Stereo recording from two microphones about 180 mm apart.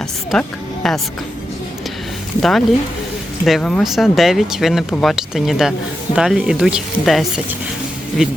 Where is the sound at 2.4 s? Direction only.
Centre (ahead or behind).